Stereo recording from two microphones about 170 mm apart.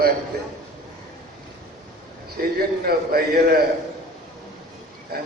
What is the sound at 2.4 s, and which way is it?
A man's voice, 60° right (ahead or behind).